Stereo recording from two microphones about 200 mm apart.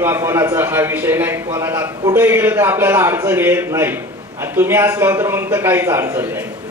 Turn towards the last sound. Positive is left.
turn(degrees=-15)  # may be behind; listen again after turning